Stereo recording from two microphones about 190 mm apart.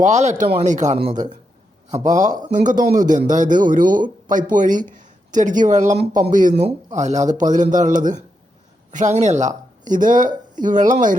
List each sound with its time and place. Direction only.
0.0 s speech: 35° right (ahead or behind)
6.0 s speech: 50° right (ahead or behind)